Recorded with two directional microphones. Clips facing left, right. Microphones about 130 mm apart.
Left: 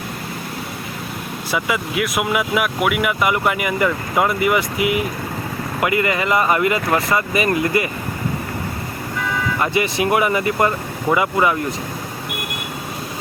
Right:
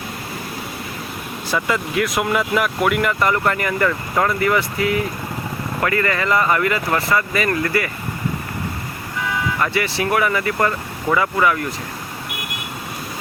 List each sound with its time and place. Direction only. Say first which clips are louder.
1.5 s speech: right 1 dB; 10° left (ahead or behind)
9.6 s speech: left 4 dB; 20° left (ahead or behind)